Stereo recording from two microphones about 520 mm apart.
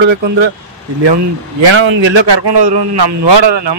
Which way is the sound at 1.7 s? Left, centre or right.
Right.